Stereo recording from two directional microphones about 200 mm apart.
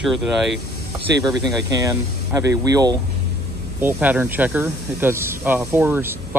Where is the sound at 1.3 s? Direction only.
20° right (ahead or behind).